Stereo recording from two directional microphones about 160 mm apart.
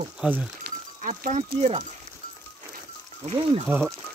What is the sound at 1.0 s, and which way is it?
Speech, 55° right (ahead or behind).